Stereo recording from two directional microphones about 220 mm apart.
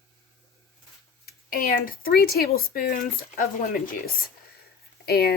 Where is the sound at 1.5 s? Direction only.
40° left (ahead or behind).